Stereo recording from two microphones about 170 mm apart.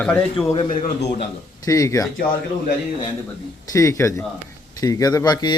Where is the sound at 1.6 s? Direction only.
20° left (ahead or behind).